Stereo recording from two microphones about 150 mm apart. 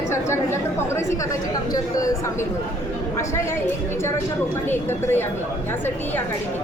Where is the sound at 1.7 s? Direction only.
25° left (ahead or behind).